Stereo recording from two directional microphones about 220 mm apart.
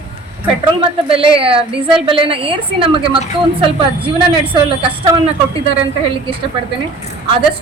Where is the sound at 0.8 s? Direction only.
25° right (ahead or behind).